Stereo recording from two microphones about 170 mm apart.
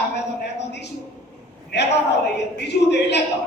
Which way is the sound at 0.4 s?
90° left.